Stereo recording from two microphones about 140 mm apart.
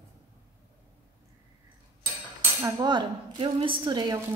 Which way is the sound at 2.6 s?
30° right (ahead or behind).